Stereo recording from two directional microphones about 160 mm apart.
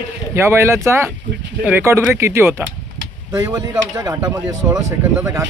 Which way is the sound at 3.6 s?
25° right (ahead or behind).